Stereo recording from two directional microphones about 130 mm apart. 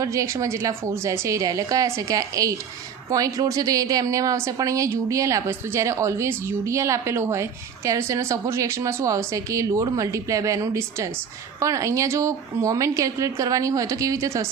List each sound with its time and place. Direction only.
0.0 s a woman's voice: 25° right (ahead or behind)